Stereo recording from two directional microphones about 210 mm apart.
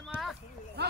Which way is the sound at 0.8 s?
50° right (ahead or behind).